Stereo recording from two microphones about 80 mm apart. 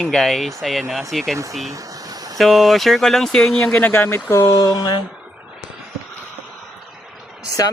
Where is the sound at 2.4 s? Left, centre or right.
Centre.